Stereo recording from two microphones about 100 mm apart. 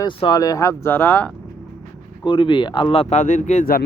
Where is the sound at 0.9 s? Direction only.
20° left (ahead or behind).